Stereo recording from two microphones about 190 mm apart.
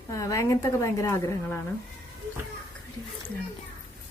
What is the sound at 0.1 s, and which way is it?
A woman's voice, 15° left (ahead or behind).